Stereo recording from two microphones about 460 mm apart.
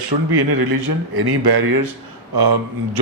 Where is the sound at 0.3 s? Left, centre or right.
Right.